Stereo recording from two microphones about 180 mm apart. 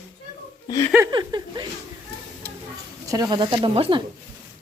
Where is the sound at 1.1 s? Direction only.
25° right (ahead or behind).